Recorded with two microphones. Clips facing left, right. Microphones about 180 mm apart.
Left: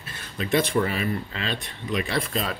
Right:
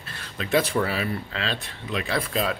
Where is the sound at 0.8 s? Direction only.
90° right.